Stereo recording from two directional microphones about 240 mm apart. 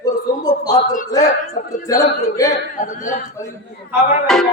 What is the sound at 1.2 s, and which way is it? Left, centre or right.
A man's voice, left.